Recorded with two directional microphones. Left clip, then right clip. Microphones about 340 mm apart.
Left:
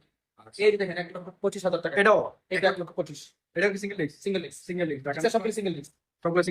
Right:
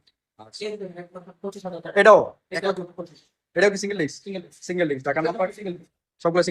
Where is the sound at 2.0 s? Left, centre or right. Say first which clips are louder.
Right 9 dB; centre.